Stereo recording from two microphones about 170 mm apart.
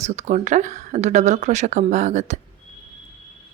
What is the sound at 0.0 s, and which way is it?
Speech, 40° right (ahead or behind).